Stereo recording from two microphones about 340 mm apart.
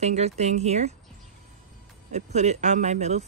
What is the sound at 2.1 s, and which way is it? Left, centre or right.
Speech, centre.